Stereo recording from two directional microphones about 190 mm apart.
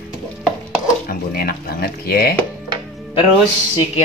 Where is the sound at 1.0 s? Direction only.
50° left (ahead or behind).